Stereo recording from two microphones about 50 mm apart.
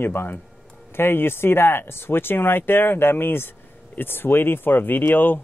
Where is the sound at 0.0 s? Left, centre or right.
Left.